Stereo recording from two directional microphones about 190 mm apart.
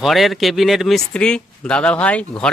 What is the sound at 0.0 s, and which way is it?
Speech, centre (ahead or behind).